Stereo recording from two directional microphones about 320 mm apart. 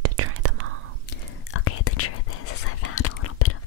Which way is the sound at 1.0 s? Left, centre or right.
Left.